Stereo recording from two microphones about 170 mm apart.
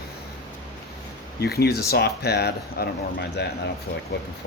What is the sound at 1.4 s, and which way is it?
Speech, 70° left (ahead or behind).